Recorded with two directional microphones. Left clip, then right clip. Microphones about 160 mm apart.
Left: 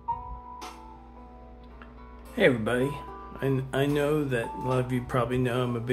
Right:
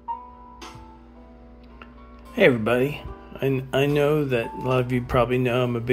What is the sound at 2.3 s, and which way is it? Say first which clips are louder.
Speech: right 5 dB; 15° right (ahead or behind).